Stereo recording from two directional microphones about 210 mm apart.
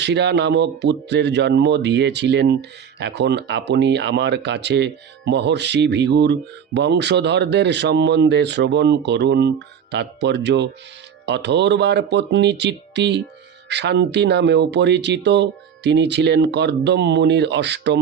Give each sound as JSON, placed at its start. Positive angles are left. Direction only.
{"t": 0.0, "sound": "speech", "side_deg": -55}